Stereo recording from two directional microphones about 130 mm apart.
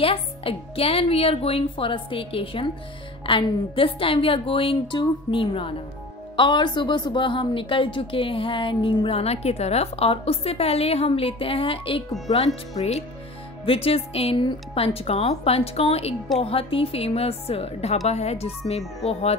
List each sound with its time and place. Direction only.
0.0 s a woman's voice: 45° left (ahead or behind)